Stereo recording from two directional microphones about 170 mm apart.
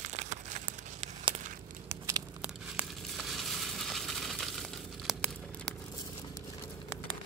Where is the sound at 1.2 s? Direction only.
45° right (ahead or behind).